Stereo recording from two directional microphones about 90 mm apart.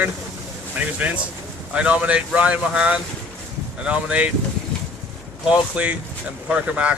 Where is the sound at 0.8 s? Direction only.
15° right (ahead or behind).